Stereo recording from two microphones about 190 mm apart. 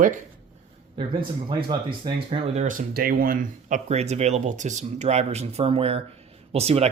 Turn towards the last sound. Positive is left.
turn(degrees=-35)  # may be behind; listen again after turning